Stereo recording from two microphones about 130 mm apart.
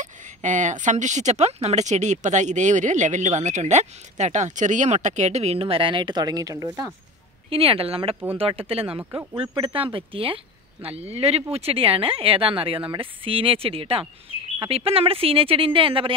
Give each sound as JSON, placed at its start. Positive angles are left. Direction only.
{"t": 0.0, "sound": "speech", "side_deg": -75}
{"t": 7.4, "sound": "speech", "side_deg": -45}
{"t": 9.1, "sound": "speech", "side_deg": -15}
{"t": 9.5, "sound": "speech", "side_deg": -40}